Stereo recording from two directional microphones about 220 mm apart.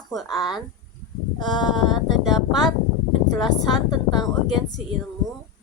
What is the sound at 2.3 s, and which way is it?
Speech, 20° left (ahead or behind).